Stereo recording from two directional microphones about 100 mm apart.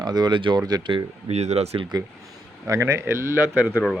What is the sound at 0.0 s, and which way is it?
Speech, 45° right (ahead or behind).